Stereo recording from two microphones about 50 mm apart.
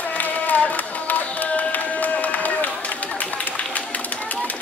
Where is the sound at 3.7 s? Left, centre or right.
Left.